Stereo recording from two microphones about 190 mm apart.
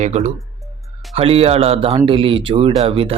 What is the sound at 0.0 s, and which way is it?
Speech, 35° right (ahead or behind).